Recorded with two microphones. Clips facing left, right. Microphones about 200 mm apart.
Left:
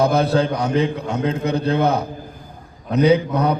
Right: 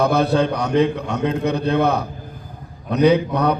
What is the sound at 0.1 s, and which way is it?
A man's voice, 65° right (ahead or behind).